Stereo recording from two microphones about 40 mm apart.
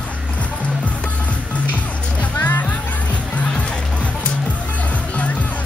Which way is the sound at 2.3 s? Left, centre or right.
Left.